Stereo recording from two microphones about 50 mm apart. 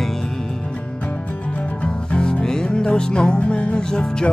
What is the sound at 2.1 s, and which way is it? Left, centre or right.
Music, centre.